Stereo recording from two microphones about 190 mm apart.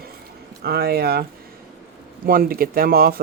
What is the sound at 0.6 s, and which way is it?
Speech, 55° right (ahead or behind).